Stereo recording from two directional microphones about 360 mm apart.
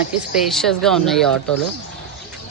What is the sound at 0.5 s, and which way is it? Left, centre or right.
Speech, centre.